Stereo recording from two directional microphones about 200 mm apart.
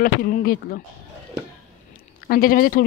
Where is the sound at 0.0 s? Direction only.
45° left (ahead or behind).